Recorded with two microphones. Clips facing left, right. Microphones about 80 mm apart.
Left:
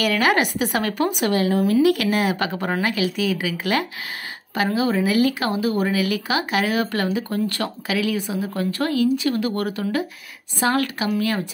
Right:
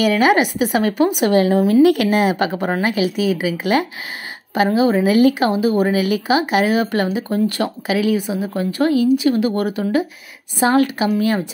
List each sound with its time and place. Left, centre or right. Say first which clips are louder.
0.0 s speech: right 5 dB; centre
1.3 s speech: right 4 dB; right